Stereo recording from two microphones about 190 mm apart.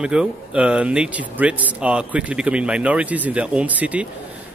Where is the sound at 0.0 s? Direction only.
5° right (ahead or behind).